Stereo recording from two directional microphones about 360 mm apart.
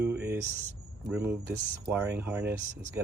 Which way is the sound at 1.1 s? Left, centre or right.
Centre.